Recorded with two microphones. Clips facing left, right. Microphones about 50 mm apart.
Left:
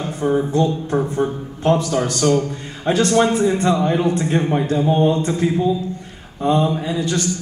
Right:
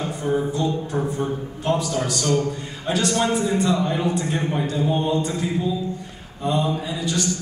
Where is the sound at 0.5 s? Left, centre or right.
Left.